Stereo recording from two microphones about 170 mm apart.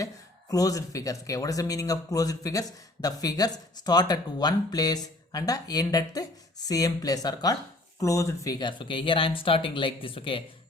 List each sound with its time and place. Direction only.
0.5 s speech: 20° left (ahead or behind)